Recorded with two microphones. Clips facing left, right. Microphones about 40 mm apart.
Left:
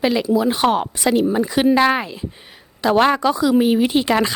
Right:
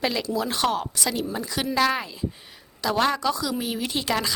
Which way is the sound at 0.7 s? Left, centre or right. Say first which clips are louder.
Left 8 dB; left.